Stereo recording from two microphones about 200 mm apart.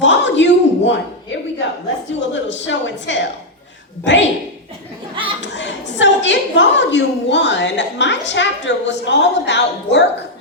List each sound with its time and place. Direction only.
0.0 s a sound: 65° left (ahead or behind)
2.3 s a woman's voice: 65° left (ahead or behind)
5.4 s a woman's voice: 65° left (ahead or behind)